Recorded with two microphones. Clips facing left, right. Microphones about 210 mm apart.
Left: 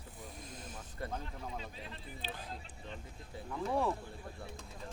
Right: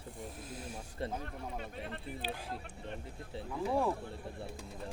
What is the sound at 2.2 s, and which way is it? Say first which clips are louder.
Speech: right 3 dB; 10° right (ahead or behind).